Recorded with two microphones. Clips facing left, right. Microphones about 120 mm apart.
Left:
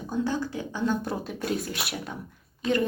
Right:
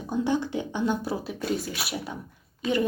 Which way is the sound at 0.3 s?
20° right (ahead or behind).